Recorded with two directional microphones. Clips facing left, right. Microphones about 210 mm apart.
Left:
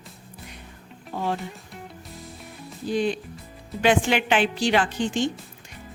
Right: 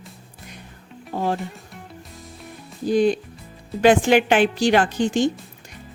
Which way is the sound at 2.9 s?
45° right (ahead or behind).